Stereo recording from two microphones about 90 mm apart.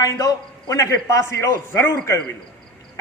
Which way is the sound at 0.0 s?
40° left (ahead or behind).